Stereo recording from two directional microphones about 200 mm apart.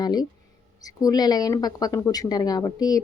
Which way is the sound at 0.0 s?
20° left (ahead or behind).